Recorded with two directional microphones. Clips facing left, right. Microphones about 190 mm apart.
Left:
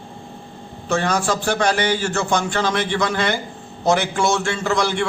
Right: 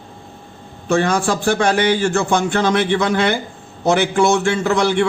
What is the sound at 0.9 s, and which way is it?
A man's voice, 50° right (ahead or behind).